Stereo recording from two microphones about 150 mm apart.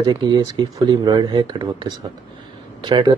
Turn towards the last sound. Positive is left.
turn(degrees=-30)  # may be behind; listen again after turning